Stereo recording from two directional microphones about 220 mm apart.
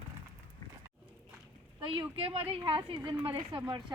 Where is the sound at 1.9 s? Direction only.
25° right (ahead or behind).